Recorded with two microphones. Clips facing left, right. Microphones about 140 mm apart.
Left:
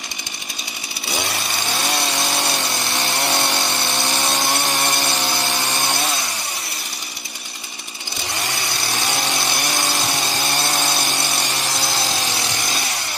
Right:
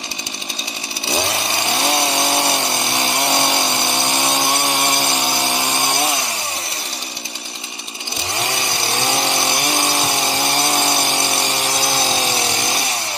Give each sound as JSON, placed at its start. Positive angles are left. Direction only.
{"t": 1.0, "sound": "chainsaw", "side_deg": -25}
{"t": 1.8, "sound": "vehicle", "side_deg": -25}
{"t": 8.5, "sound": "vehicle", "side_deg": -20}
{"t": 10.1, "sound": "power tool", "side_deg": -20}